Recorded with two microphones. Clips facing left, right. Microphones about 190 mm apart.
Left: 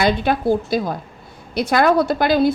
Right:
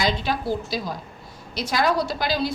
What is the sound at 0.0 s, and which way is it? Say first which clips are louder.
A woman's voice: left 7 dB; 55° left (ahead or behind).